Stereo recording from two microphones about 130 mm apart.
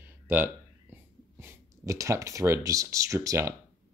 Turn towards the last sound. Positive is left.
turn(degrees=-20)  # may be behind; listen again after turning